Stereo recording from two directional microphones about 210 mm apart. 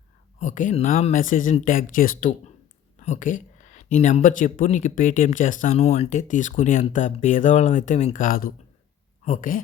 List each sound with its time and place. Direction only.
0.3 s speech: 35° left (ahead or behind)